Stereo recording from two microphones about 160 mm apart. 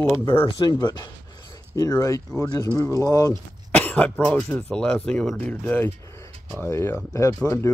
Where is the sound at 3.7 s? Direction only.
10° left (ahead or behind).